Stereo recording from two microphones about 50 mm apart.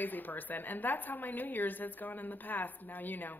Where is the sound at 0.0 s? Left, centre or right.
Left.